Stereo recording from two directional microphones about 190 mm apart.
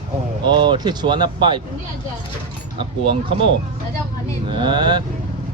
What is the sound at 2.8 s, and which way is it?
Speech, 30° right (ahead or behind).